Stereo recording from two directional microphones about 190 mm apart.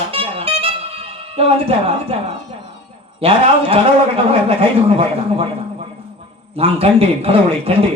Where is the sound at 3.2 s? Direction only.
30° right (ahead or behind).